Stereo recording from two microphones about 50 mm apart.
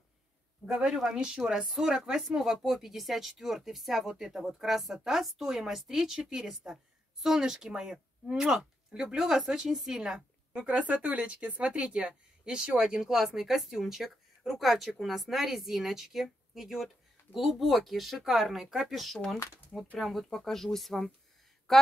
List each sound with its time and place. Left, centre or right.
0.7 s a woman's voice: centre